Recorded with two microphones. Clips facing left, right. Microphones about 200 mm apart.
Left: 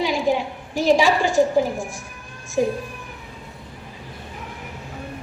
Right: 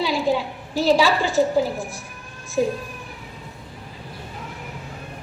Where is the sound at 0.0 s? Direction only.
15° left (ahead or behind).